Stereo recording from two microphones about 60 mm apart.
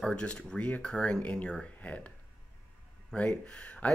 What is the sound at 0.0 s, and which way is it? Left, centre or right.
Speech, centre.